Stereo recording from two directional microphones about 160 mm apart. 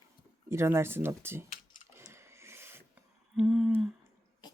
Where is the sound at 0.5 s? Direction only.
15° right (ahead or behind).